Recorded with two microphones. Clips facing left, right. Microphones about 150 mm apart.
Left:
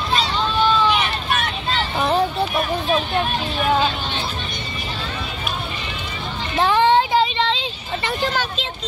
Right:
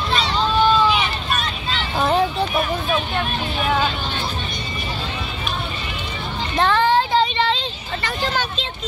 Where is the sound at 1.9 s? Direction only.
Centre (ahead or behind).